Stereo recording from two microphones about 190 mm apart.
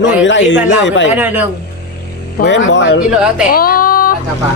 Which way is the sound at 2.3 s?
70° left (ahead or behind).